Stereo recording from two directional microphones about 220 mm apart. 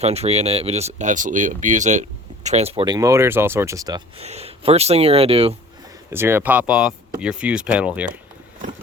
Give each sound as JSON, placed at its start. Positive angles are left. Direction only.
{"t": 0.0, "sound": "speech", "side_deg": -30}
{"t": 4.2, "sound": "speech", "side_deg": -30}
{"t": 6.1, "sound": "speech", "side_deg": -10}